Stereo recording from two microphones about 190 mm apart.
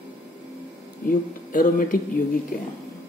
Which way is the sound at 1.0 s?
45° left (ahead or behind).